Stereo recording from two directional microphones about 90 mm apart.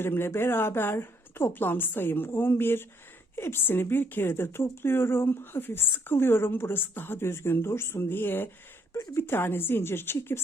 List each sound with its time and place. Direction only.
0.0 s speech: 25° left (ahead or behind)